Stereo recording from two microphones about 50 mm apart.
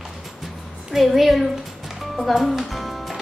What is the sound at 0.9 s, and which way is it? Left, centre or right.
A woman's voice, centre.